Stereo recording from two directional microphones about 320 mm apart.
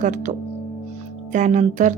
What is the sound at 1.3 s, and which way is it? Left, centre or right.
Speech, right.